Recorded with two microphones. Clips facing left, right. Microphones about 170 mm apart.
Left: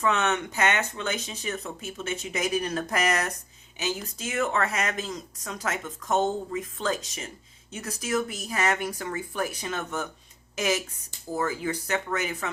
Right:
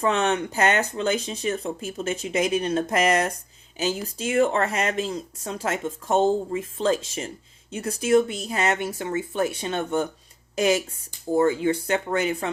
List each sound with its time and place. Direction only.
0.0 s speech: 30° right (ahead or behind)